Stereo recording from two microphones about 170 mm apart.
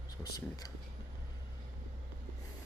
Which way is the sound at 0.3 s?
20° left (ahead or behind).